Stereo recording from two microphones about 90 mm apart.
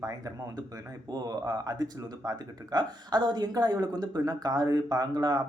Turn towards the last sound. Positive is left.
turn(degrees=-50)  # may be behind; listen again after turning